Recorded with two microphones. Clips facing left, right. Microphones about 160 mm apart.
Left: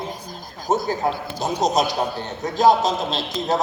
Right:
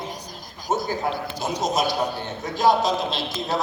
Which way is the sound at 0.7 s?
40° left (ahead or behind).